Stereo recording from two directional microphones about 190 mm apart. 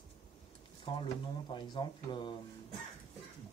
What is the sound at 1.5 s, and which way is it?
Speech, 25° left (ahead or behind).